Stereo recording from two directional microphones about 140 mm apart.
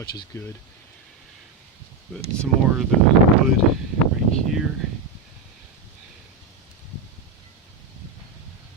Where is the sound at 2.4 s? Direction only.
Centre (ahead or behind).